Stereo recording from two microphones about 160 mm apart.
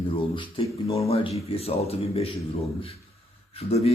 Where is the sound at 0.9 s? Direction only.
40° left (ahead or behind).